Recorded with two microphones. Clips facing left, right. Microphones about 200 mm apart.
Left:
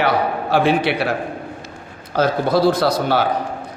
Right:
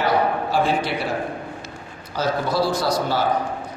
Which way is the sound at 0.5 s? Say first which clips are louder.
Left 8 dB; 65° left (ahead or behind).